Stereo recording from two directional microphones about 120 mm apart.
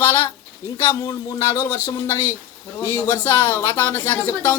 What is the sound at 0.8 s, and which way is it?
A man's voice, 35° left (ahead or behind).